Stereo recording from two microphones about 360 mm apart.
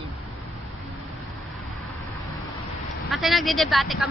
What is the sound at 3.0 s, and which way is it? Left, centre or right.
Speech, centre.